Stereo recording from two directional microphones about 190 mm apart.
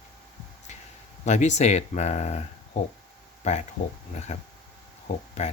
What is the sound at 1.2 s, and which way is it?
Speech, 35° left (ahead or behind).